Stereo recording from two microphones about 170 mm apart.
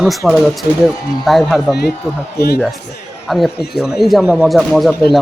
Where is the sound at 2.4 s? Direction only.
70° left (ahead or behind).